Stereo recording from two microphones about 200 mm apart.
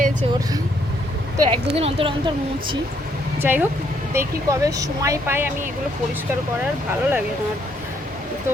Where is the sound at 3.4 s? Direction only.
10° right (ahead or behind).